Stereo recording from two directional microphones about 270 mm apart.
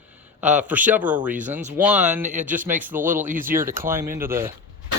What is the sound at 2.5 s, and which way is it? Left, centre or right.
A man's voice, centre.